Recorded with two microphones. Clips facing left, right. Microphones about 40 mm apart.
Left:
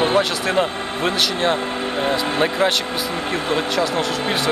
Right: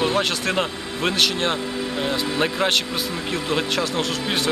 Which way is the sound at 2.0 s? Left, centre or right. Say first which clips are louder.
Left 3 dB; left.